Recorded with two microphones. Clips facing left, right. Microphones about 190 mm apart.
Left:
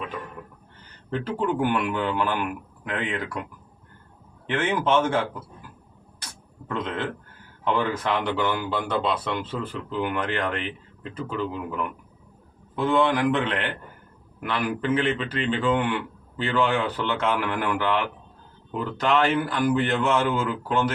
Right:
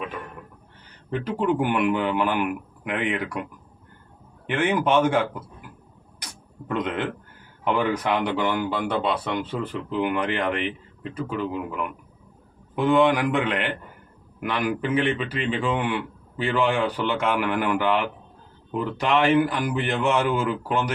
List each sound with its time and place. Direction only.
1.1 s a man's voice: 15° right (ahead or behind)
4.4 s a man's voice: 15° right (ahead or behind)
6.1 s beatboxing: 15° right (ahead or behind)
7.6 s a man's voice: 15° right (ahead or behind)
12.7 s a man's voice: 15° right (ahead or behind)